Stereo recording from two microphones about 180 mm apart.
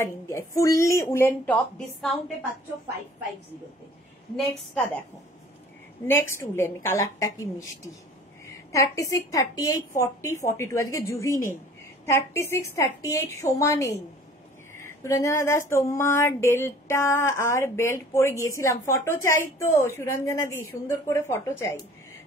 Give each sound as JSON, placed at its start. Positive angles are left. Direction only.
{"t": 0.0, "sound": "speech", "side_deg": 15}
{"t": 4.4, "sound": "speech", "side_deg": 10}
{"t": 6.0, "sound": "speech", "side_deg": 15}
{"t": 8.5, "sound": "speech", "side_deg": 15}